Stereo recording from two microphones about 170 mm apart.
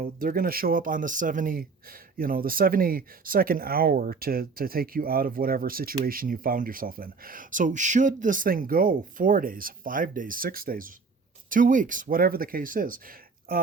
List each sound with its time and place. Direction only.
0.0 s speech: 55° right (ahead or behind)